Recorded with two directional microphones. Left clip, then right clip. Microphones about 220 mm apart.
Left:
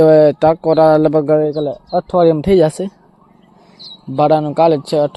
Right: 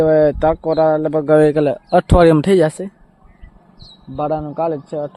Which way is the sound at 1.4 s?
15° right (ahead or behind).